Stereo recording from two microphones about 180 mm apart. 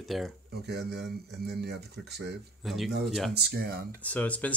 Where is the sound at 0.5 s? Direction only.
65° right (ahead or behind).